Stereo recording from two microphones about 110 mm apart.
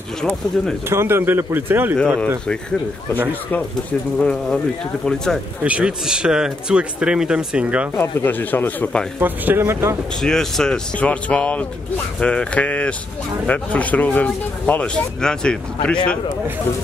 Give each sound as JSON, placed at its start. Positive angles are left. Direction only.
{"t": 0.2, "sound": "speech", "side_deg": 5}
{"t": 0.8, "sound": "speech", "side_deg": -20}
{"t": 2.0, "sound": "speech", "side_deg": 10}
{"t": 4.2, "sound": "speech", "side_deg": 10}
{"t": 5.6, "sound": "speech", "side_deg": -10}
{"t": 8.0, "sound": "speech", "side_deg": 20}
{"t": 9.2, "sound": "speech", "side_deg": -15}
{"t": 10.2, "sound": "speech", "side_deg": 5}